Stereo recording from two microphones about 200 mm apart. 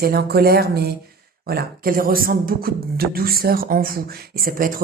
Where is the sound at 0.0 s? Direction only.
50° right (ahead or behind).